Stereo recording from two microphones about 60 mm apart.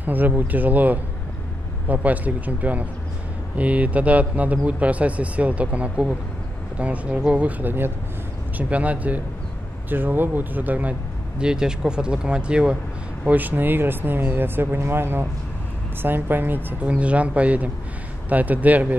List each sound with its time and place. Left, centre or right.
0.0 s speech: right
13.3 s speech: right
16.8 s speech: right